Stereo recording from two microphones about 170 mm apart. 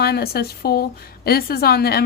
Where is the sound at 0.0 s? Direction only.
70° left (ahead or behind).